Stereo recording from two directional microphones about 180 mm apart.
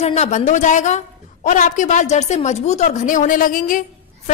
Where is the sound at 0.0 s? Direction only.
40° left (ahead or behind).